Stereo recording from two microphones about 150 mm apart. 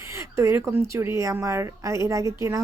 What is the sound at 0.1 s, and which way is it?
Speech, 20° right (ahead or behind).